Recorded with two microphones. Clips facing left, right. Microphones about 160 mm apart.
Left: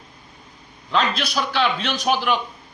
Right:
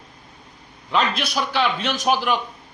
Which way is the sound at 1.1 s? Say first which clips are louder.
Even; 50° right (ahead or behind).